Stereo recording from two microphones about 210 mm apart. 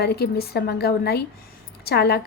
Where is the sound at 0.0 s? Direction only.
50° left (ahead or behind).